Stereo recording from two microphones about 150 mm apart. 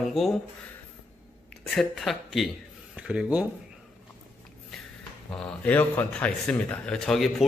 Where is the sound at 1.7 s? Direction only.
Centre (ahead or behind).